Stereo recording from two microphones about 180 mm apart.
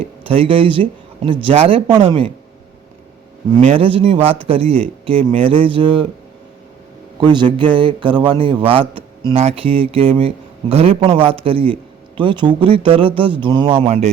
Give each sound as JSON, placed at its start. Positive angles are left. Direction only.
{"t": 0.3, "sound": "speech", "side_deg": -30}
{"t": 3.6, "sound": "a man's voice", "side_deg": -30}
{"t": 7.2, "sound": "a man's voice", "side_deg": -25}